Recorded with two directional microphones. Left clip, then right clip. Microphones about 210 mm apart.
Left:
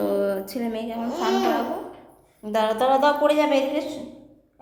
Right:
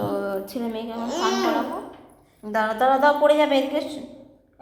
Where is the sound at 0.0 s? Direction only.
15° left (ahead or behind).